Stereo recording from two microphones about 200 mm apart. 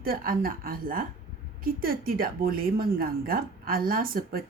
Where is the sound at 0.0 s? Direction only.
45° right (ahead or behind).